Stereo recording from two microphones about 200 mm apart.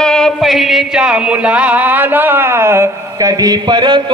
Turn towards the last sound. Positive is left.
turn(degrees=-20)  # may be behind; listen again after turning